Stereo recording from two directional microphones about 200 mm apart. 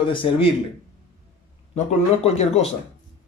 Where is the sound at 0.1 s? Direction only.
25° left (ahead or behind).